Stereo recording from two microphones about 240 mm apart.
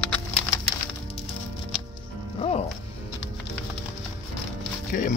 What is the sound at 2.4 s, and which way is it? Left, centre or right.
Music, left.